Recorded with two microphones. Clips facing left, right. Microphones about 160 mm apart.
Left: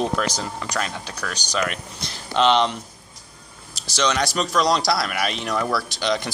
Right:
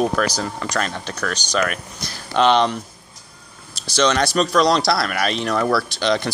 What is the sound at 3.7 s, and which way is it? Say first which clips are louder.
Speech: right 4 dB; 15° left (ahead or behind).